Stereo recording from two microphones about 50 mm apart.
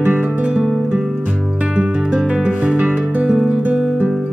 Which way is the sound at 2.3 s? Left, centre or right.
Right.